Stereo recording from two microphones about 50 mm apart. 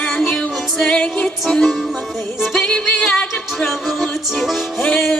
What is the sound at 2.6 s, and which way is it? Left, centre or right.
Music, centre.